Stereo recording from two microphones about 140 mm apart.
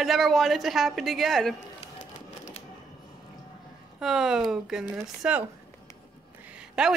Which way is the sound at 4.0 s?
5° right (ahead or behind).